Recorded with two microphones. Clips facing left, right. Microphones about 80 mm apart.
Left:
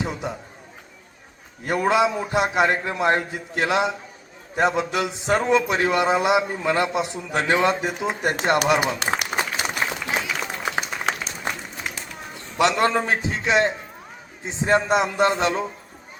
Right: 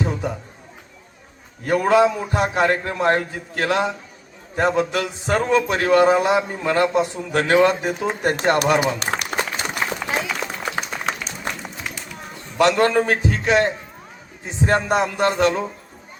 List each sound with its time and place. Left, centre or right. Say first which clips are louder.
1.6 s a man's voice: right 4 dB; left
8.8 s a sound: right 1 dB; centre
9.8 s applause: right 4 dB; centre
12.5 s a man's voice: right 3 dB; centre
14.9 s a man's voice: right 1 dB; left